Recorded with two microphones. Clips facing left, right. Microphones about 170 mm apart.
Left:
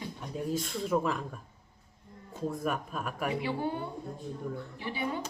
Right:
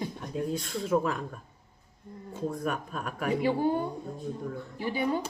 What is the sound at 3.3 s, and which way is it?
A woman's voice, 45° right (ahead or behind).